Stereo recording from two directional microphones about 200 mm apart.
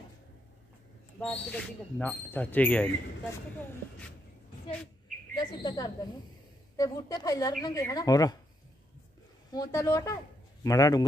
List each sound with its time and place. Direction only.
1.2 s speech: 5° left (ahead or behind)
5.3 s a woman's voice: 20° left (ahead or behind)
9.5 s speech: 15° left (ahead or behind)